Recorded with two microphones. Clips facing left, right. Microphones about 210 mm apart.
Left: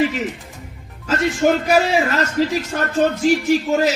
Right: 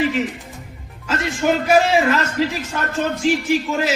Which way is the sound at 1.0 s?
40° left (ahead or behind).